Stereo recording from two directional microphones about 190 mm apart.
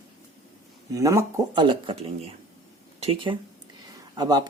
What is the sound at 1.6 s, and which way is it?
Speech, 25° right (ahead or behind).